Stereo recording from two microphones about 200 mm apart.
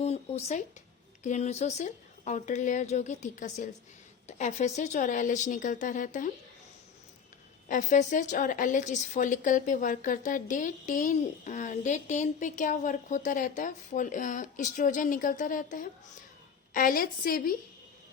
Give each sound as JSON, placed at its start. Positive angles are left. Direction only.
{"t": 0.0, "sound": "a sound", "side_deg": 30}
{"t": 1.2, "sound": "a woman's voice", "side_deg": 35}
{"t": 7.7, "sound": "a woman's voice", "side_deg": 35}